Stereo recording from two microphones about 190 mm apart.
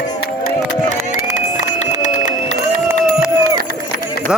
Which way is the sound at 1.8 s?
40° left (ahead or behind).